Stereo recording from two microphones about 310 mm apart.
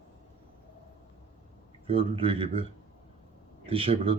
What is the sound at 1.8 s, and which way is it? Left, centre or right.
Speech, centre.